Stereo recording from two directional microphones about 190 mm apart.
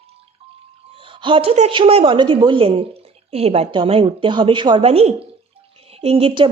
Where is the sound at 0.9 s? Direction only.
30° right (ahead or behind).